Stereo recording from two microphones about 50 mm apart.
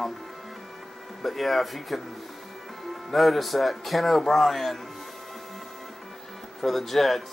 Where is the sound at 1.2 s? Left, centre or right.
Centre.